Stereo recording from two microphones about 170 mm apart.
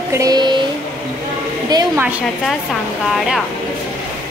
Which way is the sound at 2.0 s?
10° right (ahead or behind).